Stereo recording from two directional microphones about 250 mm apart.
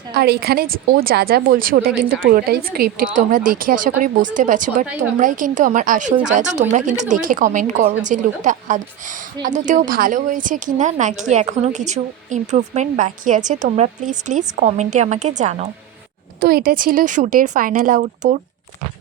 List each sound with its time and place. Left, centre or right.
0.1 s a woman's voice: right